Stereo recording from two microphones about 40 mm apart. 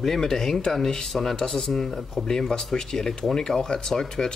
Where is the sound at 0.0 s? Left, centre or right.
Centre.